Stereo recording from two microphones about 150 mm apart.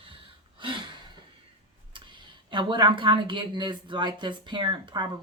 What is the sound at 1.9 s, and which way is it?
Speech, 30° right (ahead or behind).